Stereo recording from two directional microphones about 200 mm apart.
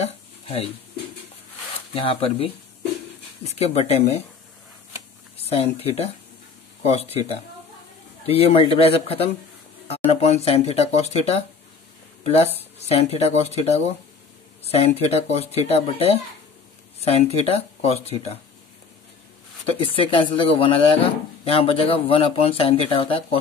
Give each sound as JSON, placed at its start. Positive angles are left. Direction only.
{"t": 0.0, "sound": "a sound", "side_deg": 30}
{"t": 2.0, "sound": "speech", "side_deg": 25}
{"t": 5.5, "sound": "speech", "side_deg": 30}
{"t": 19.8, "sound": "speech", "side_deg": 25}